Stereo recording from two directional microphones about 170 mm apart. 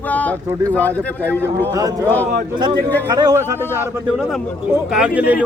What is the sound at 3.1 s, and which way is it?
Speech, 25° right (ahead or behind).